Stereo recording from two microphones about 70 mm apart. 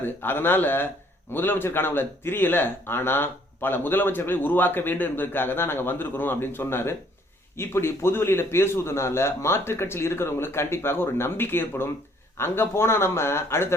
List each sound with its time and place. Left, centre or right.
0.0 s speech: left